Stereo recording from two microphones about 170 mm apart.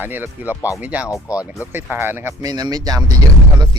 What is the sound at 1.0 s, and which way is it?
Speech, 20° left (ahead or behind).